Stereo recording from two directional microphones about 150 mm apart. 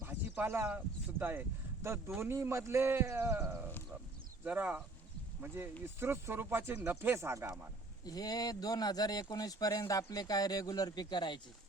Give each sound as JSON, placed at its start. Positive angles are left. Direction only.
{"t": 0.0, "sound": "a sound", "side_deg": -15}
{"t": 1.2, "sound": "a man's voice", "side_deg": -15}
{"t": 5.8, "sound": "a man's voice", "side_deg": -15}
{"t": 8.0, "sound": "speech", "side_deg": 25}